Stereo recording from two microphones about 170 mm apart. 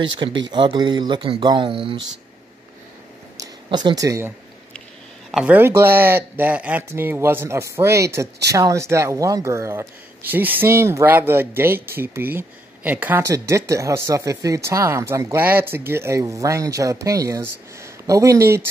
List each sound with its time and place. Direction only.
0.0 s speech: 30° right (ahead or behind)
3.3 s a sound: 25° right (ahead or behind)
5.3 s speech: 10° right (ahead or behind)